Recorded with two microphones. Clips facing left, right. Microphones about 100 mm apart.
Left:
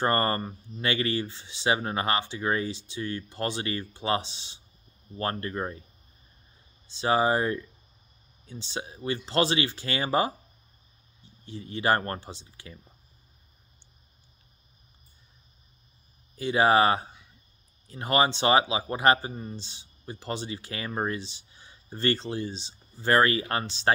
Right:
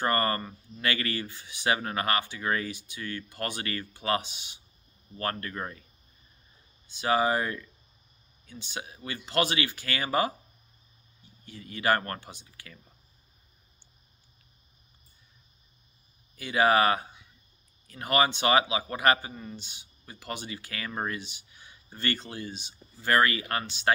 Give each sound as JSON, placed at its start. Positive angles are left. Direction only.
{"t": 0.0, "sound": "speech", "side_deg": 30}
{"t": 6.9, "sound": "speech", "side_deg": 30}
{"t": 16.3, "sound": "speech", "side_deg": 30}